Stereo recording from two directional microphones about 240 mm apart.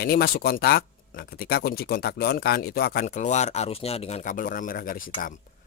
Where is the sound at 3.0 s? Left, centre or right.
Left.